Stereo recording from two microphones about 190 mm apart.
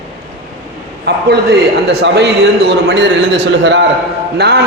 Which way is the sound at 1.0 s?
60° right (ahead or behind).